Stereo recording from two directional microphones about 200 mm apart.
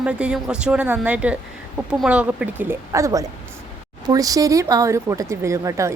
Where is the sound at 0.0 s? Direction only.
5° right (ahead or behind).